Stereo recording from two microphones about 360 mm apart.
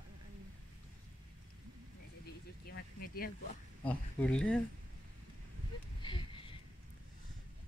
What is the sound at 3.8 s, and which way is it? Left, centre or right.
Speech, centre.